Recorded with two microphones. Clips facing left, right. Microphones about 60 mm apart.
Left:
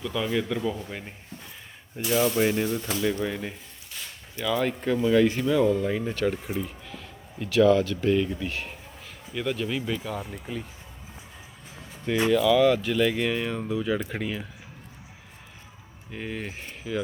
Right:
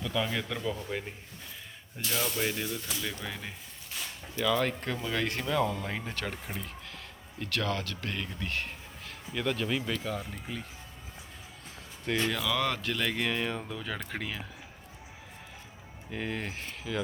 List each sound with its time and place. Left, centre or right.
0.0 s speech: centre
2.0 s speech: centre
2.6 s speech: left
3.2 s speech: centre
11.8 s speech: centre
16.1 s speech: centre